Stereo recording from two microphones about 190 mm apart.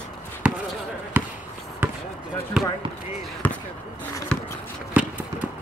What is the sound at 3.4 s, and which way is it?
Basketball bounce, 10° left (ahead or behind).